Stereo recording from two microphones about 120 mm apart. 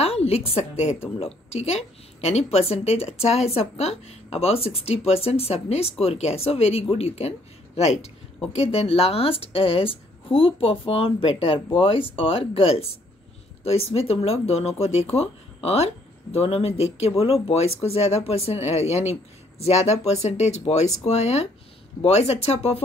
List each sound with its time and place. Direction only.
0.0 s a woman's voice: 60° left (ahead or behind)
13.9 s a woman's voice: 55° left (ahead or behind)